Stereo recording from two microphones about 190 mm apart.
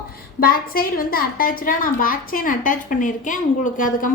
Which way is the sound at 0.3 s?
50° left (ahead or behind).